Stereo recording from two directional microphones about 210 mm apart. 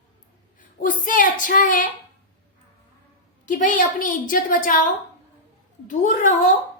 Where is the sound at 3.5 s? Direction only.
40° left (ahead or behind).